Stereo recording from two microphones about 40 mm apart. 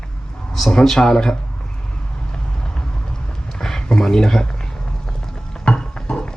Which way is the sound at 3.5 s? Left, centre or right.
Centre.